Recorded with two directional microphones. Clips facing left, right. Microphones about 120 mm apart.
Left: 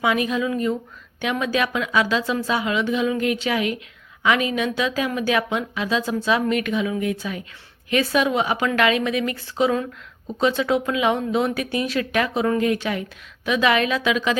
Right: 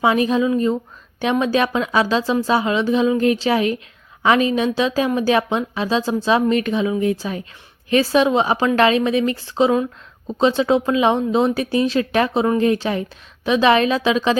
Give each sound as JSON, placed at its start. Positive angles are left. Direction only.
{"t": 0.0, "sound": "a woman's voice", "side_deg": -30}